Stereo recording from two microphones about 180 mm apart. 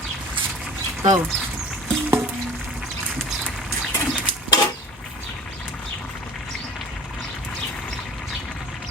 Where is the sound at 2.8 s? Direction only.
Centre (ahead or behind).